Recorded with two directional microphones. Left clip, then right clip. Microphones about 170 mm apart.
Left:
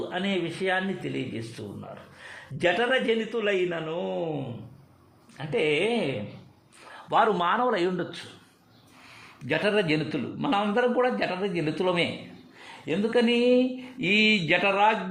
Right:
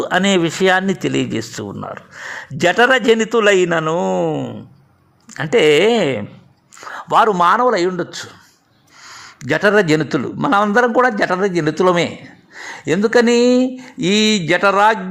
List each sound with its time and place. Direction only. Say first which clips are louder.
0.1 s speech: right 17 dB; 75° right (ahead or behind); by 4.3 s 50° right (ahead or behind)
5.4 s speech: right 13 dB; 60° right (ahead or behind)
6.9 s speech: right 10 dB; 45° right (ahead or behind); by 8.0 s 25° right (ahead or behind)
9.4 s a man's voice: right 11 dB; 45° right (ahead or behind)